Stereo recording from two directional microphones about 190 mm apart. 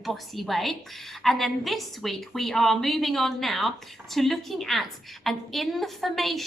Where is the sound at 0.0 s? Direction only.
Centre (ahead or behind).